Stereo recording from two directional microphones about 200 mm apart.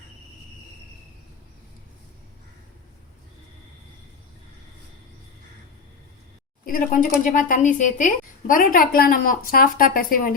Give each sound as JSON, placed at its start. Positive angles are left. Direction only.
{"t": 6.7, "sound": "a woman's voice", "side_deg": 45}